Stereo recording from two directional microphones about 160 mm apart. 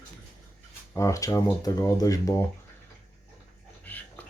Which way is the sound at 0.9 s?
20° left (ahead or behind).